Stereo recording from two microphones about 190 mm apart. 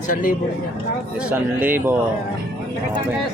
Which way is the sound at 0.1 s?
50° left (ahead or behind).